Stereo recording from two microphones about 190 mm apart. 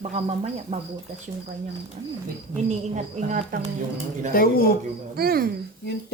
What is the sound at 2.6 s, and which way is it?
Speech, 40° right (ahead or behind).